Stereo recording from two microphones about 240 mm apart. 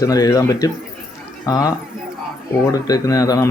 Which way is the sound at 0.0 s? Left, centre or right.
Centre.